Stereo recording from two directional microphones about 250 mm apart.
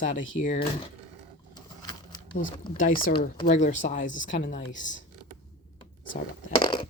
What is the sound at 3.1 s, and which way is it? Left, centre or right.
Speech, left.